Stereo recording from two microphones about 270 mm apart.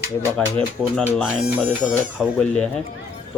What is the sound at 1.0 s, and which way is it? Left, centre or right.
Speech, centre.